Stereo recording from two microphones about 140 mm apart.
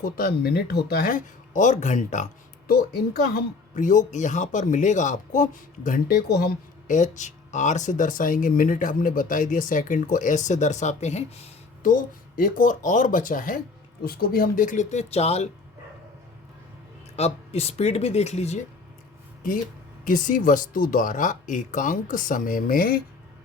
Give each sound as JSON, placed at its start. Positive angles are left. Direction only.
{"t": 0.0, "sound": "speech", "side_deg": 90}
{"t": 11.8, "sound": "speech", "side_deg": 70}
{"t": 14.0, "sound": "speech", "side_deg": 90}
{"t": 17.2, "sound": "speech", "side_deg": 50}
{"t": 20.1, "sound": "speech", "side_deg": 75}